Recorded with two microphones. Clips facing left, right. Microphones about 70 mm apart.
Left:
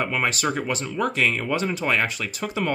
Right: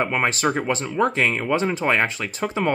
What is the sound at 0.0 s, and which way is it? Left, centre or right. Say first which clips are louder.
Speech: right 3 dB; right.